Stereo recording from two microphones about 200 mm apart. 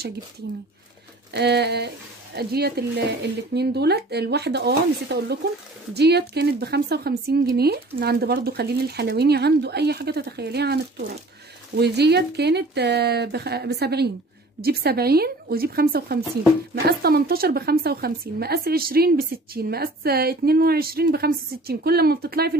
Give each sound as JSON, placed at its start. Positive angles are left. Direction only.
{"t": 1.3, "sound": "a woman's voice", "side_deg": -55}